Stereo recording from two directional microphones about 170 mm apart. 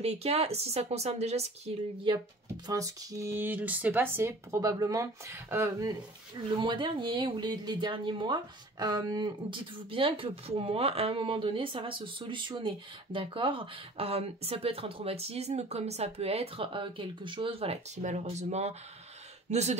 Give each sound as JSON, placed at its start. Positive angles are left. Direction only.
{"t": 0.0, "sound": "speech", "side_deg": -35}
{"t": 2.4, "sound": "speech", "side_deg": -20}
{"t": 6.6, "sound": "speech", "side_deg": -30}